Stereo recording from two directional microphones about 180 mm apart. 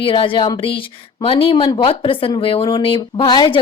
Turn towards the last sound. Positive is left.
turn(degrees=25)  # may be behind; listen again after turning